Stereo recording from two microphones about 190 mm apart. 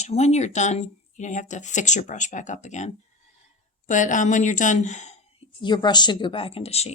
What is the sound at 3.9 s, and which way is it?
Speech, 40° left (ahead or behind).